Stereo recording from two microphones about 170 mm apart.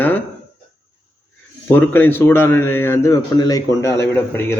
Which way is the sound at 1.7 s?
10° left (ahead or behind).